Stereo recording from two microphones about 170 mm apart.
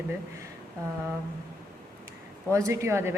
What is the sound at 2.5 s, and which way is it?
Speech, 20° right (ahead or behind).